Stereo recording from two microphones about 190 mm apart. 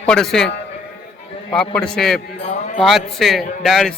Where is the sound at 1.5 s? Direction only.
5° left (ahead or behind).